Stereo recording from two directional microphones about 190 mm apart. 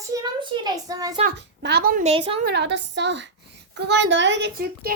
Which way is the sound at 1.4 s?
60° right (ahead or behind).